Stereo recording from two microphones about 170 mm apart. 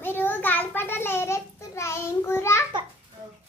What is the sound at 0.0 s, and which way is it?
Child singing, 10° left (ahead or behind).